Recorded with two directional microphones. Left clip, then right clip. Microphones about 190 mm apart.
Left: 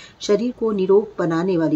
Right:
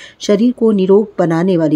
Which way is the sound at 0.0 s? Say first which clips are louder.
Right 6 dB; 35° right (ahead or behind).